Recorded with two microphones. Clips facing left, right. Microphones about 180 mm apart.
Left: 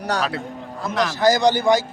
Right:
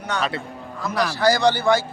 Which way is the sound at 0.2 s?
Centre (ahead or behind).